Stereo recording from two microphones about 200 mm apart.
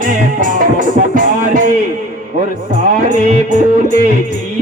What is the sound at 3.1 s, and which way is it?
Music, 40° right (ahead or behind).